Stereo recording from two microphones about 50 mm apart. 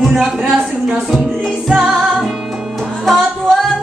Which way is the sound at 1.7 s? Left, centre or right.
Centre.